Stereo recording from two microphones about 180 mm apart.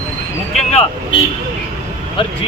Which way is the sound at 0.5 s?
35° left (ahead or behind).